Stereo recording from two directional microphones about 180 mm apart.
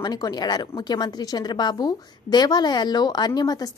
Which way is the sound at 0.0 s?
20° left (ahead or behind).